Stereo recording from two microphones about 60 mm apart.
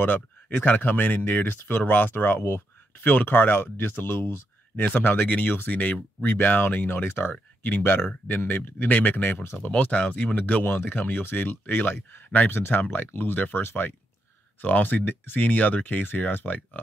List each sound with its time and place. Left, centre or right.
0.0 s speech: left
9.6 s speech: left